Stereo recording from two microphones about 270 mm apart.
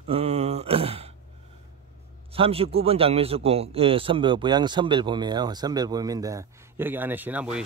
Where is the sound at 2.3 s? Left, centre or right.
Right.